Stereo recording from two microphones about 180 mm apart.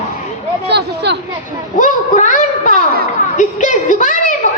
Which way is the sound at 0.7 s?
65° right (ahead or behind).